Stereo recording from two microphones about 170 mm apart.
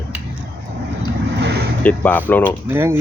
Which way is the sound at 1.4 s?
80° right.